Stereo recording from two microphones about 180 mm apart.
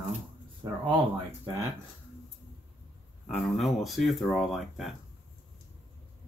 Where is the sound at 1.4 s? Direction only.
15° right (ahead or behind).